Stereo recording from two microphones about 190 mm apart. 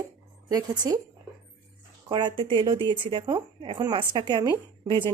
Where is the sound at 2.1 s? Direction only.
25° right (ahead or behind).